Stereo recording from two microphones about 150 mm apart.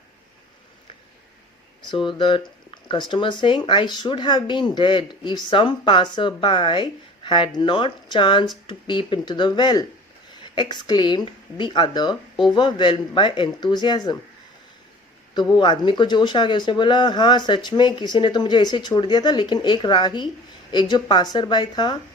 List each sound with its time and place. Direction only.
1.8 s speech: 30° left (ahead or behind)
15.4 s speech: 30° left (ahead or behind)